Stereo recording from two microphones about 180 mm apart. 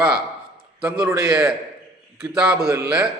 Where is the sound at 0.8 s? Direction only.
10° right (ahead or behind).